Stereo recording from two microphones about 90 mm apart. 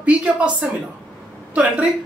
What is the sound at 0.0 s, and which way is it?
A woman's voice, 15° right (ahead or behind).